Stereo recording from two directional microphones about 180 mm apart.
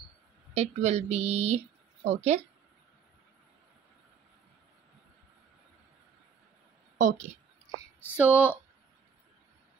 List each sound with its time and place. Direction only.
0.6 s a woman's voice: 35° right (ahead or behind)
7.0 s speech: 45° right (ahead or behind)
8.2 s speech: 10° right (ahead or behind)